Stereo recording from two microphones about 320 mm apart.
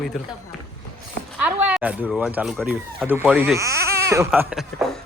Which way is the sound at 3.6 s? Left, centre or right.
Centre.